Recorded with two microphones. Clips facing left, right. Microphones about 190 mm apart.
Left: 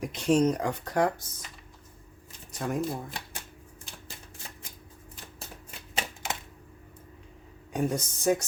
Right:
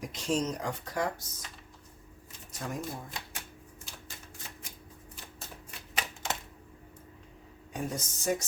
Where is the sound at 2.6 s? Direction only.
60° left (ahead or behind).